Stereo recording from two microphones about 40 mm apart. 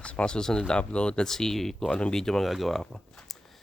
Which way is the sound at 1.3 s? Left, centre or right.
Centre.